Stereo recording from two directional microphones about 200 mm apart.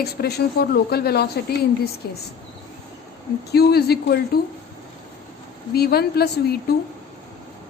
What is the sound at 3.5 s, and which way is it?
Speech, 50° left (ahead or behind).